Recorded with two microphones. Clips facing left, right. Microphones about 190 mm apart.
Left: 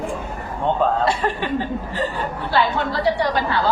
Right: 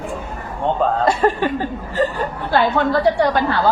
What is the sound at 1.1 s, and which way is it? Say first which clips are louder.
Speech: right 5 dB; 45° right (ahead or behind).